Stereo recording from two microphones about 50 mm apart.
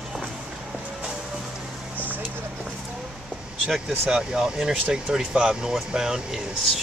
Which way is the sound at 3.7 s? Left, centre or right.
Centre.